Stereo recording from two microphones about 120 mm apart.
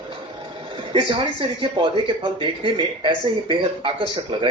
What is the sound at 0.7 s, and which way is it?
A woman's voice, 45° right (ahead or behind).